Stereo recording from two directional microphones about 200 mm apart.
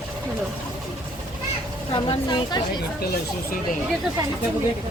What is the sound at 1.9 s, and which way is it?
Speech, 25° left (ahead or behind).